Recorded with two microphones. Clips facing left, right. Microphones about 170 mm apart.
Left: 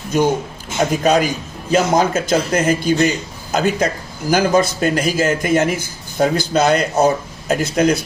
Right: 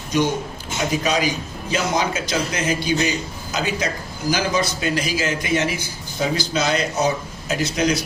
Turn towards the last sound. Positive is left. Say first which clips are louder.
# left 5 dB
turn(degrees=55)  # may be behind; listen again after turning